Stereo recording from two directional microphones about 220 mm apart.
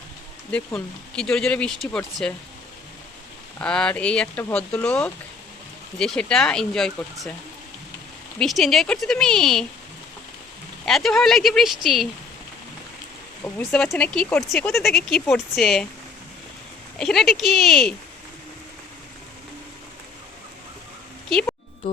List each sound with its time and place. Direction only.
0.5 s speech: 5° left (ahead or behind)
3.6 s speech: 5° left (ahead or behind)
8.4 s speech: centre (ahead or behind)
10.8 s speech: centre (ahead or behind)
13.4 s speech: 10° left (ahead or behind)
17.0 s speech: centre (ahead or behind)
21.2 s speech: centre (ahead or behind)